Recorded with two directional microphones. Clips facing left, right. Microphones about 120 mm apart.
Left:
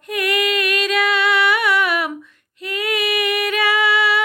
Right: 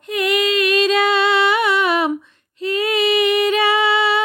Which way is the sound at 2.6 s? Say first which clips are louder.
Right 5 dB; 30° right (ahead or behind).